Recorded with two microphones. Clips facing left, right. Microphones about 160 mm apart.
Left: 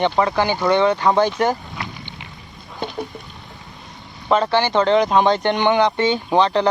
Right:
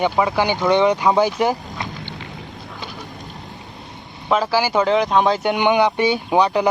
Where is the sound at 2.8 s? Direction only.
55° left (ahead or behind).